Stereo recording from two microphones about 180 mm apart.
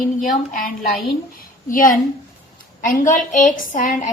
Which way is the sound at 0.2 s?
50° left (ahead or behind).